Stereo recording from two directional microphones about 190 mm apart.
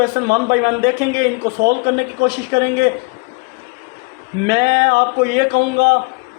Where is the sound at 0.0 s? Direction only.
55° right (ahead or behind).